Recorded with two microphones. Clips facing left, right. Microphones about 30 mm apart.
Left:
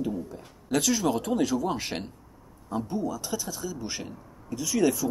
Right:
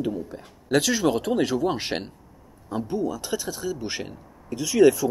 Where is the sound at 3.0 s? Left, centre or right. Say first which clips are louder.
Right 4 dB; right.